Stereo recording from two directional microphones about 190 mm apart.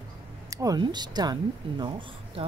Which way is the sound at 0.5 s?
20° right (ahead or behind).